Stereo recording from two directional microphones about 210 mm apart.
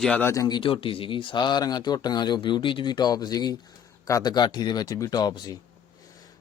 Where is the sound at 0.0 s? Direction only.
5° left (ahead or behind).